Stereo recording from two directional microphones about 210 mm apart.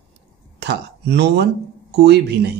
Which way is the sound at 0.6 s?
55° right (ahead or behind).